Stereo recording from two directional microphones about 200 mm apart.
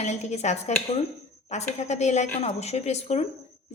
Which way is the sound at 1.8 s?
35° left (ahead or behind).